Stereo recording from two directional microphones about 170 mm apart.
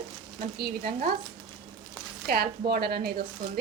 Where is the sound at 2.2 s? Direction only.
70° right (ahead or behind).